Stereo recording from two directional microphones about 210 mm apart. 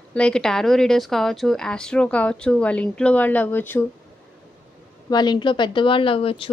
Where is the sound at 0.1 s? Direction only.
5° left (ahead or behind).